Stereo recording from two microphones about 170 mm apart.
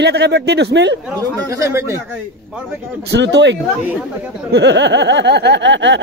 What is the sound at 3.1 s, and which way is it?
Speech, 90° right.